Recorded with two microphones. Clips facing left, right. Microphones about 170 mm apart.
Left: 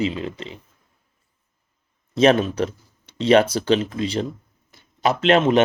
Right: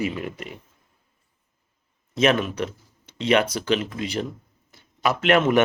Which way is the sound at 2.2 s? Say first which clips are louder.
Left 4 dB; 30° left (ahead or behind).